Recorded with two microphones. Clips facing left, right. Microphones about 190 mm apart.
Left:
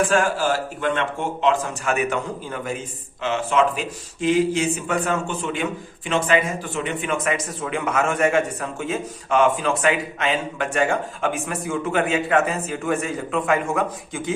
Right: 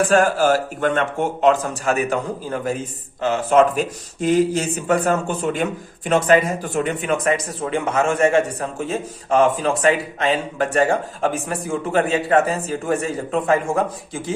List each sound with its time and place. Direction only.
0.1 s speech: 45° right (ahead or behind)